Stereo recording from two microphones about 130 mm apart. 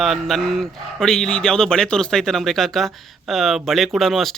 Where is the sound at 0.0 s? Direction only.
Centre (ahead or behind).